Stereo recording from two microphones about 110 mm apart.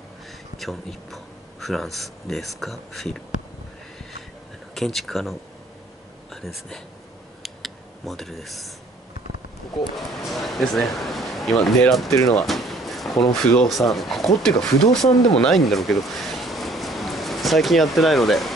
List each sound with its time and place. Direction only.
0.6 s speech: centre (ahead or behind)
4.7 s speech: centre (ahead or behind)
6.3 s speech: centre (ahead or behind)
7.4 s a sound: centre (ahead or behind)
9.9 s speech: centre (ahead or behind)
12.1 s speech: 30° left (ahead or behind)
12.4 s a sound: centre (ahead or behind)
13.4 s speech: 5° left (ahead or behind)